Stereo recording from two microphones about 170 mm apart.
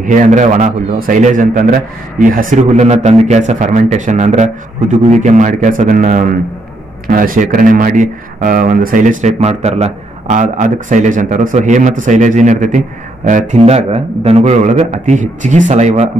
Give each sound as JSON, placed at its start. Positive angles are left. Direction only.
{"t": 0.0, "sound": "speech", "side_deg": -50}